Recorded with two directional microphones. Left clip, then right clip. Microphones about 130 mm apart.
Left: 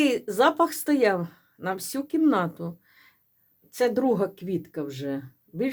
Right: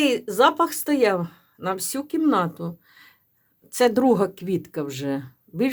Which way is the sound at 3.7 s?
40° right (ahead or behind).